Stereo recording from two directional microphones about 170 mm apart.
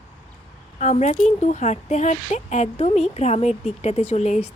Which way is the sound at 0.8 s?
45° left (ahead or behind).